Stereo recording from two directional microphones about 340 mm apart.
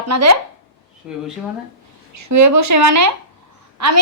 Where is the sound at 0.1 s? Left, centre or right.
Right.